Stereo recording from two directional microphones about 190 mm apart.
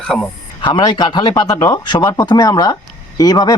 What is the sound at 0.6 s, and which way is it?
Speech, 25° left (ahead or behind).